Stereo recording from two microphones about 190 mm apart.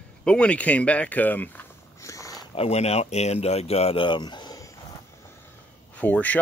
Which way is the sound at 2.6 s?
35° left (ahead or behind).